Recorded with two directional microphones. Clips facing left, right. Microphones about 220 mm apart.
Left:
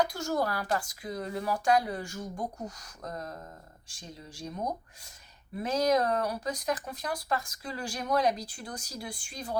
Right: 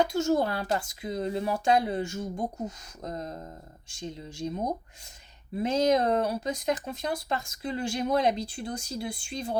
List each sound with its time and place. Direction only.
0.0 s speech: 25° right (ahead or behind)